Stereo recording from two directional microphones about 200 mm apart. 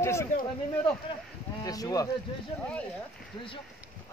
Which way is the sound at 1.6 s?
20° left (ahead or behind).